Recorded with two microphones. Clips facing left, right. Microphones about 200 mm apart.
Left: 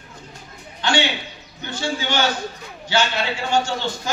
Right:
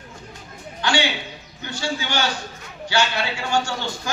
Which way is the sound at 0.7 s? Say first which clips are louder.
Left 1 dB; 20° left (ahead or behind).